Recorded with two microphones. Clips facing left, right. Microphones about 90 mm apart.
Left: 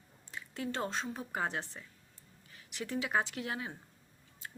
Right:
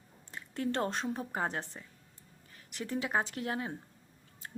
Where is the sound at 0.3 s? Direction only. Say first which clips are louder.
Right 4 dB; 45° right (ahead or behind).